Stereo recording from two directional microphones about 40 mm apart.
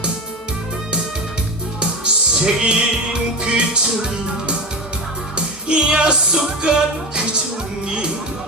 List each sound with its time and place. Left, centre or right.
1.8 s music: right
5.6 s music: right
7.9 s music: right